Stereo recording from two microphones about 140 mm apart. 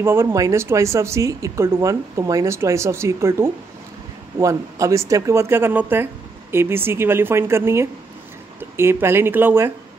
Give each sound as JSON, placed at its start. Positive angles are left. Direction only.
{"t": 0.0, "sound": "a woman's voice", "side_deg": -15}